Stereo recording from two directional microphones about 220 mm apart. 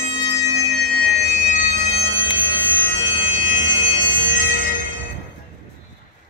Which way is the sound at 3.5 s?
60° right (ahead or behind).